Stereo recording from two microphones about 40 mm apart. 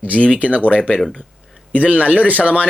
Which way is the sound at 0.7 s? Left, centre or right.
Left.